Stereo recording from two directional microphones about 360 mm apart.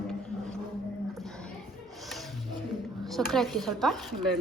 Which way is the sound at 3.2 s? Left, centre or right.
Centre.